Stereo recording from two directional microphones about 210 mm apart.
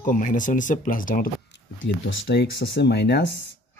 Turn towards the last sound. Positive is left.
turn(degrees=55)  # may be behind; listen again after turning